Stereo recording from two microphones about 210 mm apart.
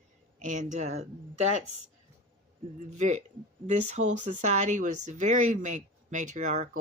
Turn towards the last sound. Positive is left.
turn(degrees=-35)  # may be behind; listen again after turning